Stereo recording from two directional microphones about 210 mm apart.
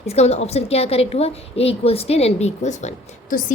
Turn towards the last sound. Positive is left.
turn(degrees=35)  # may be behind; listen again after turning